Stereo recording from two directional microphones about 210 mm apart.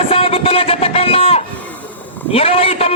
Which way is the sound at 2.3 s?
25° left (ahead or behind).